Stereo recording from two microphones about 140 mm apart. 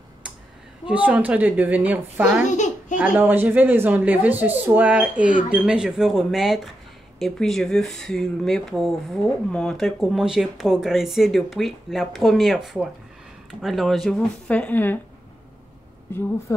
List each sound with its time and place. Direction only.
0.8 s speech: 10° right (ahead or behind)
2.4 s a child's voice: 60° left (ahead or behind)
3.0 s speech: 10° right (ahead or behind); by 15.0 s 15° left (ahead or behind)
16.1 s speech: 15° left (ahead or behind)